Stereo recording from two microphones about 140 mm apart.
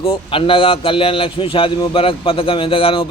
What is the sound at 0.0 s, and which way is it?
Speech, 40° left (ahead or behind).